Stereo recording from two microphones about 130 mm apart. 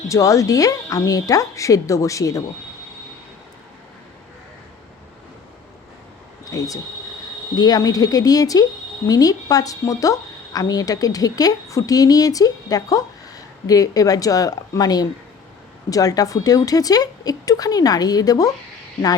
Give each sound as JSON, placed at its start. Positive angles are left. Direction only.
{"t": 0.1, "sound": "a woman's voice", "side_deg": 25}
{"t": 6.4, "sound": "a sound", "side_deg": 25}
{"t": 7.5, "sound": "a woman's voice", "side_deg": 30}